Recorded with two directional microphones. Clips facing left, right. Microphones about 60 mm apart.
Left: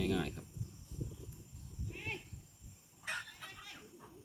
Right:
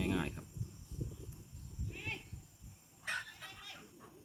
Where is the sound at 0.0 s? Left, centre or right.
Centre.